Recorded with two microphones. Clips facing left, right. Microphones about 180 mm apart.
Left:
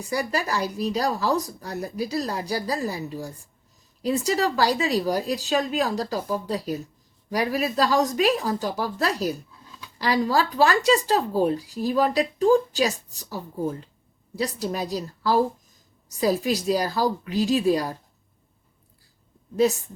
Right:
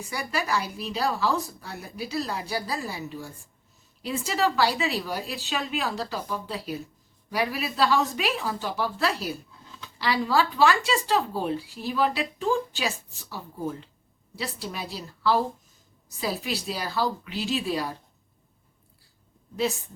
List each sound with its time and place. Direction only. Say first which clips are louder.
0.0 s a woman's voice: left 5 dB; 35° left (ahead or behind)